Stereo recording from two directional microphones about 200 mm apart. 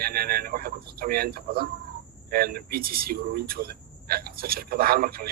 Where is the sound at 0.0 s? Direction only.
50° right (ahead or behind).